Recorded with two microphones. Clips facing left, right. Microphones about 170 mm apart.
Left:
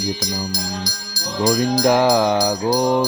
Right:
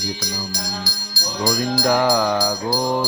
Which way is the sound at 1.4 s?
20° left (ahead or behind).